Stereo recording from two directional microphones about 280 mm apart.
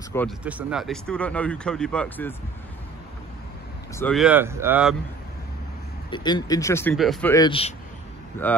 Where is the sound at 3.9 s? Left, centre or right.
Centre.